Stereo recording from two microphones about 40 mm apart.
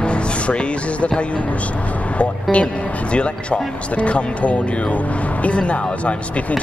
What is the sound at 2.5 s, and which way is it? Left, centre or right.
Speech, left.